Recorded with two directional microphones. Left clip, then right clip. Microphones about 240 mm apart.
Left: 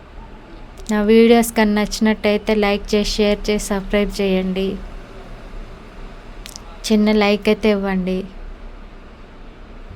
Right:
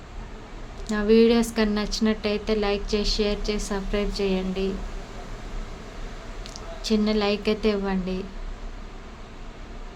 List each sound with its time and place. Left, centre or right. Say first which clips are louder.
0.9 s speech: left 6 dB; left
6.4 s a woman's voice: left 5 dB; left